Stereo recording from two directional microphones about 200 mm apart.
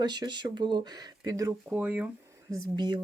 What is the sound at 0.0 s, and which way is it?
Speech, 20° right (ahead or behind).